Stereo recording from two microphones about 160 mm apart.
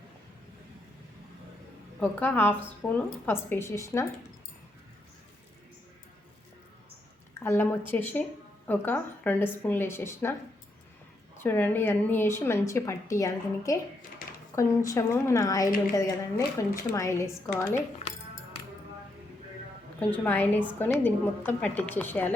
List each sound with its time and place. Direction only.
2.0 s a woman's voice: 10° left (ahead or behind)
7.3 s a woman's voice: 15° left (ahead or behind)
11.3 s a woman's voice: 15° left (ahead or behind)
18.0 s music: 45° left (ahead or behind)
20.0 s a woman's voice: 10° left (ahead or behind)